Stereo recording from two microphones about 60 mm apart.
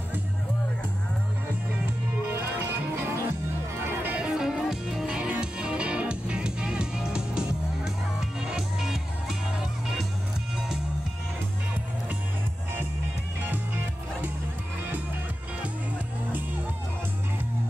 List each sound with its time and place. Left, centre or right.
2.6 s music: right
4.1 s music: centre
5.0 s music: centre
13.5 s music: right